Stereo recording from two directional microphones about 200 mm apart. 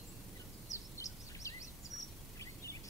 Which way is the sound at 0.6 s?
15° left (ahead or behind).